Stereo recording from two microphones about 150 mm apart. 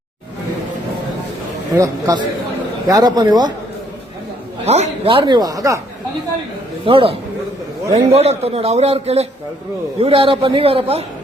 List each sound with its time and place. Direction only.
1.7 s speech: 25° right (ahead or behind)
4.6 s speech: 45° right (ahead or behind); by 5.8 s 20° right (ahead or behind)
6.8 s a man's voice: 35° right (ahead or behind)